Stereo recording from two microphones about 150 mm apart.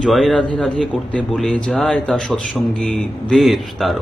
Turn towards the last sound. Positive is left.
turn(degrees=0)  # may be behind; listen again after turning